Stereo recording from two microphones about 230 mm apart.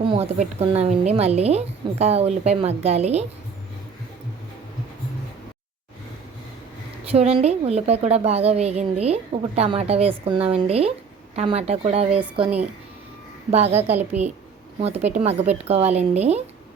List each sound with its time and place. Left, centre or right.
0.0 s a woman's voice: right
7.1 s a woman's voice: right
13.5 s a woman's voice: right
13.9 s a woman's voice: centre
14.8 s a woman's voice: right